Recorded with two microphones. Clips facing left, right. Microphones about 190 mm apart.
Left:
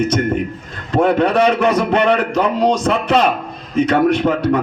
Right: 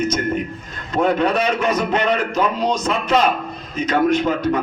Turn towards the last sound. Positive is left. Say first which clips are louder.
# left 3 dB
turn(degrees=70)  # may be behind; listen again after turning